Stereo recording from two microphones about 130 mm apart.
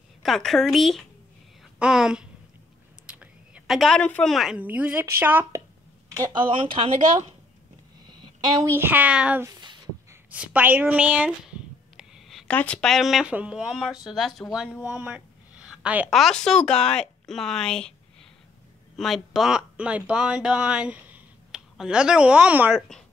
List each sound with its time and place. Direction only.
0.2 s speech: centre (ahead or behind)
3.1 s a sound: 10° right (ahead or behind)
4.6 s speech: 10° right (ahead or behind)
6.5 s speech: 45° right (ahead or behind)
8.7 s speech: 15° right (ahead or behind)
9.4 s a sound: 30° right (ahead or behind)
10.3 s a sound: 10° right (ahead or behind)
12.5 s speech: 10° left (ahead or behind)
14.8 s a sound: 10° right (ahead or behind)
16.1 s speech: centre (ahead or behind)
18.9 s speech: centre (ahead or behind)
22.8 s speech: 5° left (ahead or behind)